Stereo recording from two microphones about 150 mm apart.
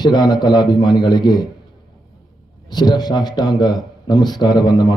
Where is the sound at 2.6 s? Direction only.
25° left (ahead or behind).